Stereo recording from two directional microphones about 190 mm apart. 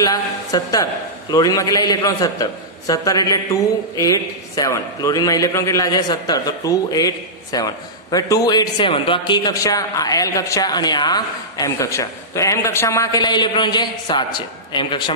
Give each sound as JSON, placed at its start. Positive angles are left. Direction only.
{"t": 0.0, "sound": "a woman's voice", "side_deg": 20}